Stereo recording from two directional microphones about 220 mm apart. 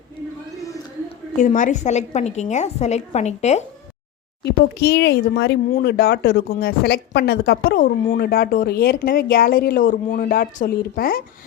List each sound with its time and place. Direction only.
1.4 s a woman's voice: 35° left (ahead or behind)
4.4 s speech: 50° left (ahead or behind)